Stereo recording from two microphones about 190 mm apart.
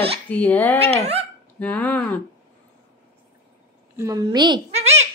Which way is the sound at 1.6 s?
5° left (ahead or behind).